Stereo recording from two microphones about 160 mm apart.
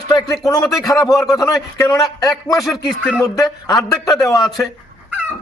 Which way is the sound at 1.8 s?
20° left (ahead or behind).